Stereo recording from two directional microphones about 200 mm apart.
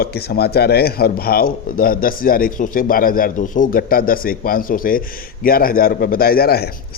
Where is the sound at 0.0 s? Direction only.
55° left (ahead or behind).